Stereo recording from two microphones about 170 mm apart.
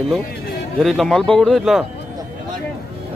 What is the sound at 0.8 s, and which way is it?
Speech, centre (ahead or behind).